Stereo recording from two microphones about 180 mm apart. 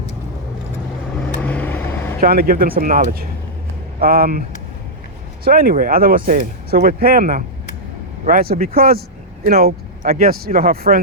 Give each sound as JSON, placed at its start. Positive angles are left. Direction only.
{"t": 1.4, "sound": "vehicle", "side_deg": 10}
{"t": 2.2, "sound": "speech", "side_deg": -55}
{"t": 5.5, "sound": "speech", "side_deg": -55}